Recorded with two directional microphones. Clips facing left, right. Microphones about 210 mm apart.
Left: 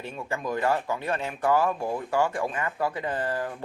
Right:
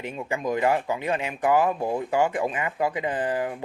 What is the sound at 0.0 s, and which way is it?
Speech, 15° right (ahead or behind).